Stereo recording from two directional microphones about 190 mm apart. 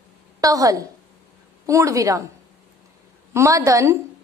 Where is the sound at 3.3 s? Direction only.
15° right (ahead or behind).